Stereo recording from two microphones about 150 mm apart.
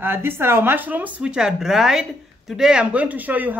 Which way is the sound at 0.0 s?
15° right (ahead or behind).